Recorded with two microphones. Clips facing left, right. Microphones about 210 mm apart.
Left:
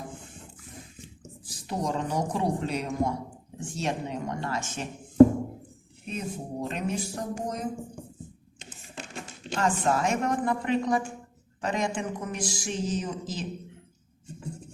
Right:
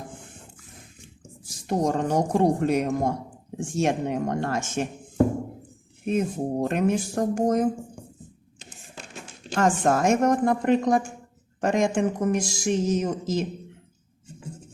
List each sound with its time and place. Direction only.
1.5 s a woman's voice: 45° right (ahead or behind)
6.1 s a woman's voice: 55° right (ahead or behind)
9.6 s a woman's voice: 50° right (ahead or behind)